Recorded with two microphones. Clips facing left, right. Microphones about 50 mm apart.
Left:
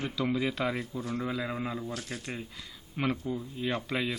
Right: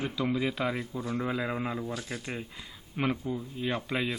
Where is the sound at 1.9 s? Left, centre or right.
Right.